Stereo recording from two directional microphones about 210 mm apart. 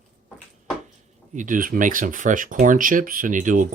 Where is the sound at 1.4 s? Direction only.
40° right (ahead or behind).